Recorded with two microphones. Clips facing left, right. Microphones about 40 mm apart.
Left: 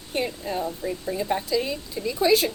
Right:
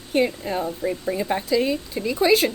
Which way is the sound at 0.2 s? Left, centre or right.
Right.